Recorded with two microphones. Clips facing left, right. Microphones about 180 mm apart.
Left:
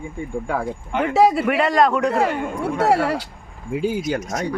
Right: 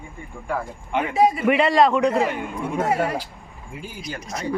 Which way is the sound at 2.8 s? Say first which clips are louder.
Left 4 dB; 75° left (ahead or behind).